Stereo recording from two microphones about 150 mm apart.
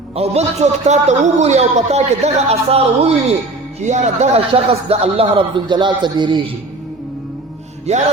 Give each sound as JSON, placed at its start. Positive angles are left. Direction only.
{"t": 0.2, "sound": "a man's voice", "side_deg": -45}
{"t": 7.9, "sound": "a man's voice", "side_deg": -50}